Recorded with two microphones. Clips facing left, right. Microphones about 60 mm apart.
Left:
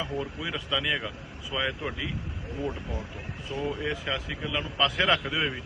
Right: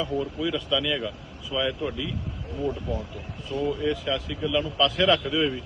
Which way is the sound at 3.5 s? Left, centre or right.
Left.